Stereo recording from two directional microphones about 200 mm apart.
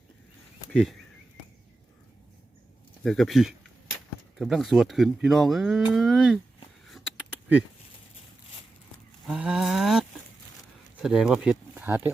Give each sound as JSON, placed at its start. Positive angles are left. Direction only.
{"t": 0.7, "sound": "speech", "side_deg": 0}
{"t": 3.0, "sound": "speech", "side_deg": 0}
{"t": 6.8, "sound": "a sound", "side_deg": -5}
{"t": 9.2, "sound": "speech", "side_deg": -5}